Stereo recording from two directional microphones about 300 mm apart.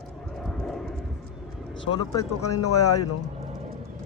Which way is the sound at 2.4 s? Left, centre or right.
Left.